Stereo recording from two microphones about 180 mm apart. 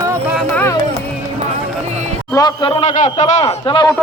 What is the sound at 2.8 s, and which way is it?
A man's voice, 40° left (ahead or behind).